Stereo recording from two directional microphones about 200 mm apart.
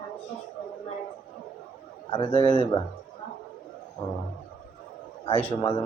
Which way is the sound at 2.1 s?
20° left (ahead or behind).